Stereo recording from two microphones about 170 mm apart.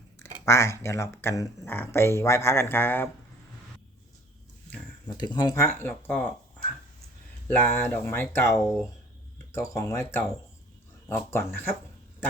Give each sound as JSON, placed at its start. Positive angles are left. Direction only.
{"t": 0.4, "sound": "speech", "side_deg": 15}
{"t": 5.0, "sound": "speech", "side_deg": 25}
{"t": 7.4, "sound": "speech", "side_deg": 10}